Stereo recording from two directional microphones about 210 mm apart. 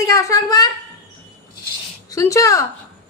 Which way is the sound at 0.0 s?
15° left (ahead or behind).